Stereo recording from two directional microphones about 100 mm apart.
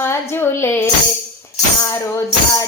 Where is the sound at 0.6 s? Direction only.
25° left (ahead or behind).